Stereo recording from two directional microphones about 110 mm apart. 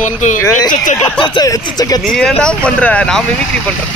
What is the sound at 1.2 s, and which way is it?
Speech, 35° left (ahead or behind).